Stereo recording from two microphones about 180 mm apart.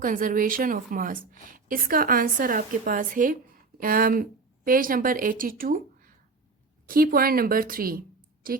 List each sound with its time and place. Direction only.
0.0 s a woman's voice: 50° right (ahead or behind)